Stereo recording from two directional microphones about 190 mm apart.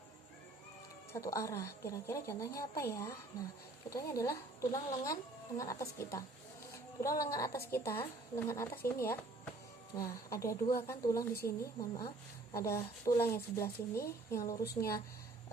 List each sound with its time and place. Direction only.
1.1 s a woman's voice: 15° left (ahead or behind)